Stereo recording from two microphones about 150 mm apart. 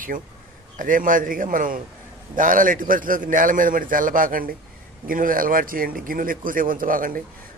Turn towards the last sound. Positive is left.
turn(degrees=-65)  # may be behind; listen again after turning